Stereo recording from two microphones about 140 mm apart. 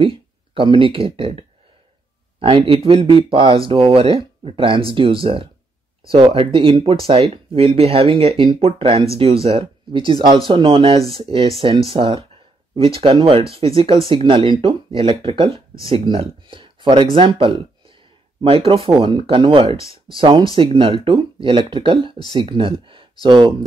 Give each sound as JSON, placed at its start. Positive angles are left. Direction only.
{"t": 0.0, "sound": "speech", "side_deg": -40}
{"t": 2.4, "sound": "speech", "side_deg": -40}